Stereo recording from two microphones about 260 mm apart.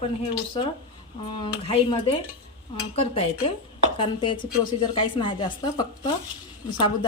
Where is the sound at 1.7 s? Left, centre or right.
Left.